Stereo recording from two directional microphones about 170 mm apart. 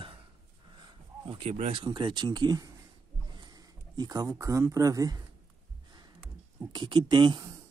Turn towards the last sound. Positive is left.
turn(degrees=-20)  # may be behind; listen again after turning